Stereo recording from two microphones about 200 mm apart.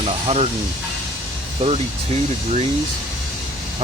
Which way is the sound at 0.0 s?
30° right (ahead or behind).